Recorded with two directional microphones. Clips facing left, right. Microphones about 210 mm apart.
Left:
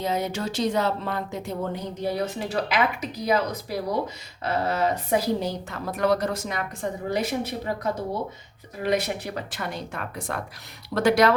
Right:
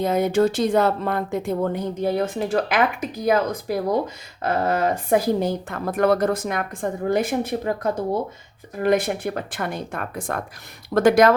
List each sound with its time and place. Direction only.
0.0 s speech: 55° right (ahead or behind)